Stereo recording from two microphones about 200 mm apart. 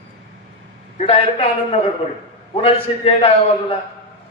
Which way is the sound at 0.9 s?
30° left (ahead or behind).